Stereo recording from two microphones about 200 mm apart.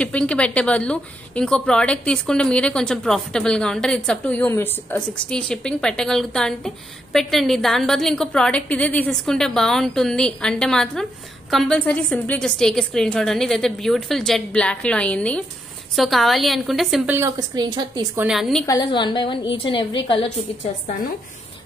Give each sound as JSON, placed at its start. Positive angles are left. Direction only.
{"t": 0.0, "sound": "speech", "side_deg": 5}
{"t": 18.2, "sound": "speech", "side_deg": 0}
{"t": 18.7, "sound": "a woman's voice", "side_deg": 20}